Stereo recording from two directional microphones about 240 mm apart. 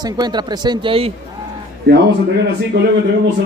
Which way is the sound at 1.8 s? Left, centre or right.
Right.